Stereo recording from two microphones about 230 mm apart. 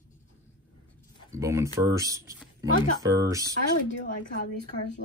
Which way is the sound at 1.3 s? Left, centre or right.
Centre.